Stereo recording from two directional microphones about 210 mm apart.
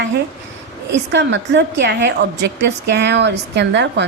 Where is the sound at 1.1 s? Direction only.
55° right (ahead or behind).